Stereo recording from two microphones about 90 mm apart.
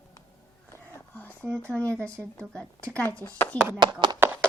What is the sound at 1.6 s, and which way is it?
Speech, 15° left (ahead or behind).